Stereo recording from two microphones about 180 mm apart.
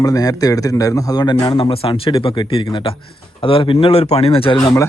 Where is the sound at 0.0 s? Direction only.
20° left (ahead or behind).